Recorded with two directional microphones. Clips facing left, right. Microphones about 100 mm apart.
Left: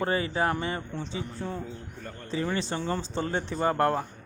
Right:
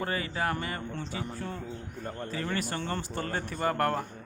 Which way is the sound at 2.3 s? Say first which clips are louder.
Left 5 dB; 20° left (ahead or behind).